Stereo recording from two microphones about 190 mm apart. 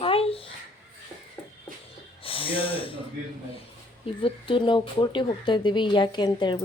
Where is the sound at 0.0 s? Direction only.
30° left (ahead or behind).